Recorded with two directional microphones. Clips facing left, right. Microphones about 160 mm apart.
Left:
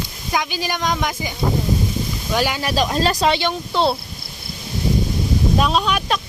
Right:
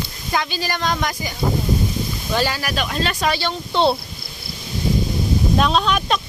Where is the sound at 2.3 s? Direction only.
15° left (ahead or behind).